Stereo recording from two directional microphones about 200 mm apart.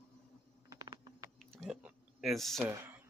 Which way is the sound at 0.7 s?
20° right (ahead or behind).